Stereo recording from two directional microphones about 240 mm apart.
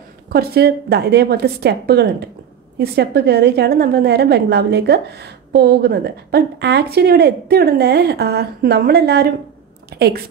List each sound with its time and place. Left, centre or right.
0.3 s a woman's voice: right